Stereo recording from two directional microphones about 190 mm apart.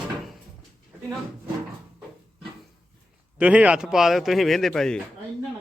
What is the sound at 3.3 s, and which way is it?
A man's voice, 5° right (ahead or behind).